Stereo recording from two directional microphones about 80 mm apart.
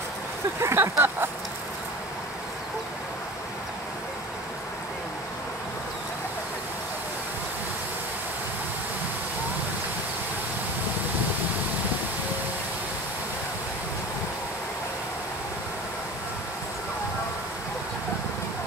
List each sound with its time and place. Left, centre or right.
0.6 s speech: right